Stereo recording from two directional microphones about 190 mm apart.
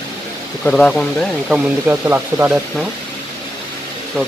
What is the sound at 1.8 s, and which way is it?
Speech, 10° right (ahead or behind).